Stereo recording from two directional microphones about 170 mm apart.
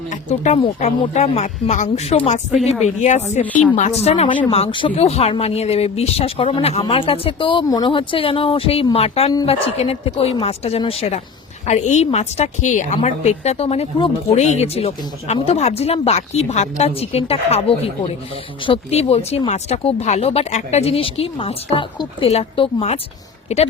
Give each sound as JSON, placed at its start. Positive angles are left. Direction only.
{"t": 0.1, "sound": "speech", "side_deg": 45}
{"t": 3.4, "sound": "a woman's voice", "side_deg": 10}
{"t": 4.0, "sound": "speech", "side_deg": 35}